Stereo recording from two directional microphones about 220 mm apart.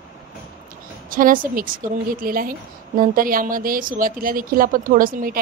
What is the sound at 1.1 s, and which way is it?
Speech, 40° right (ahead or behind).